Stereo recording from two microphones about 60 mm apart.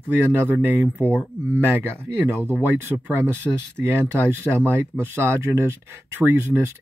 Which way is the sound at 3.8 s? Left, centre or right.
Right.